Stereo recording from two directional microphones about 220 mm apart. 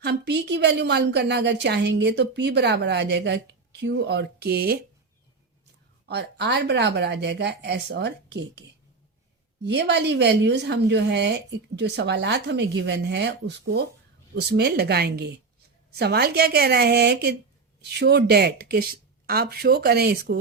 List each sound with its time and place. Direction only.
0.0 s a woman's voice: 50° right (ahead or behind)
6.1 s a woman's voice: 50° right (ahead or behind)
9.6 s a woman's voice: 50° right (ahead or behind)
14.3 s a woman's voice: 50° right (ahead or behind)